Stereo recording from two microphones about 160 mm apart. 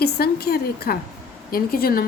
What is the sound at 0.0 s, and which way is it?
A woman's voice, 80° left.